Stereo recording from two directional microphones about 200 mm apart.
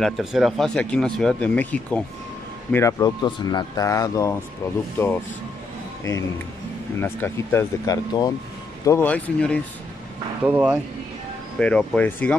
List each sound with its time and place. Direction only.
0.0 s speech: centre (ahead or behind)
7.0 s speech: 10° left (ahead or behind)
10.4 s speech: 5° right (ahead or behind)
11.6 s speech: 5° left (ahead or behind)